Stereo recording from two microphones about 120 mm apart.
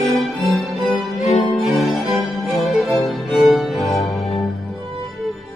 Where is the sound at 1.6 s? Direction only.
Centre (ahead or behind).